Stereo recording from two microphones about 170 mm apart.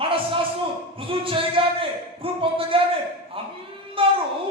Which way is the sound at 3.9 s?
30° right (ahead or behind).